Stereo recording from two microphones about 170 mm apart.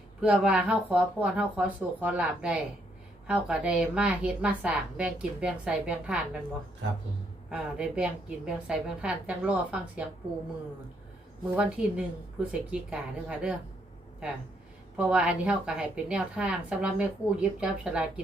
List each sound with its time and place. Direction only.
0.2 s a woman's voice: 5° right (ahead or behind)
7.5 s a woman's voice: 5° right (ahead or behind)
11.5 s a woman's voice: 5° right (ahead or behind)
14.9 s a woman's voice: 5° right (ahead or behind)